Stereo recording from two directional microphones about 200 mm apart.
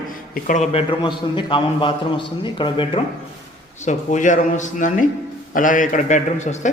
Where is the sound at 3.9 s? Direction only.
40° left (ahead or behind).